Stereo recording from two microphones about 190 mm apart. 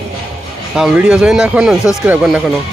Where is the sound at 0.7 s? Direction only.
5° right (ahead or behind).